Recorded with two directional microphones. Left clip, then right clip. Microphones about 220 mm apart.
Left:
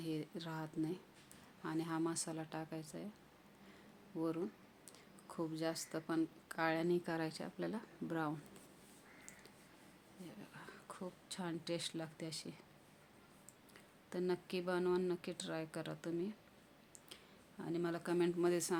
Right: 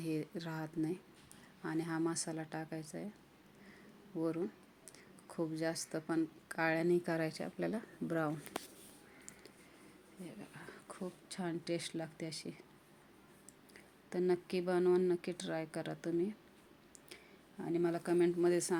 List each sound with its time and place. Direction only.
0.0 s a woman's voice: 10° right (ahead or behind)
4.2 s a woman's voice: 10° right (ahead or behind)
10.6 s a woman's voice: 5° right (ahead or behind)
13.7 s speech: 5° right (ahead or behind)
17.6 s speech: 5° right (ahead or behind)